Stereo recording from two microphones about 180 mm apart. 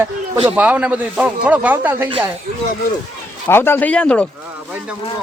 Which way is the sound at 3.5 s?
10° left (ahead or behind).